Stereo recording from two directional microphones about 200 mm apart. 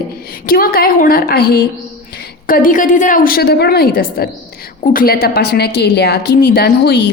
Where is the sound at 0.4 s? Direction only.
45° left (ahead or behind).